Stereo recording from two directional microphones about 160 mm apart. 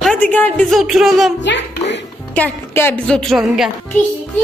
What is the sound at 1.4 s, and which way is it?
Music, 90° left.